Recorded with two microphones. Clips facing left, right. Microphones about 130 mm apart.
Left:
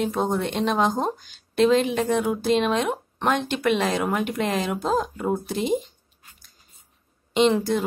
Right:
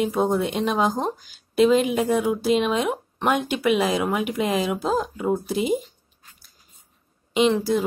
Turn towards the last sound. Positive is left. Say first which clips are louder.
# even
turn(degrees=0)  # may be behind; listen again after turning